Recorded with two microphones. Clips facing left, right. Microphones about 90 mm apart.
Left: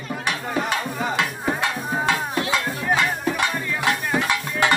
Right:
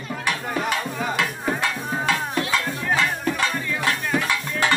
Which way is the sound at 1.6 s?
20° left (ahead or behind).